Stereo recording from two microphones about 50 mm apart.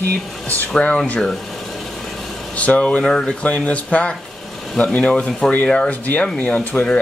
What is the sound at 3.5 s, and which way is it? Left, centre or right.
Speech, left.